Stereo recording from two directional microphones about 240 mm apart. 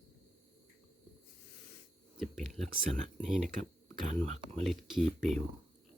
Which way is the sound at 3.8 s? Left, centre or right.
Right.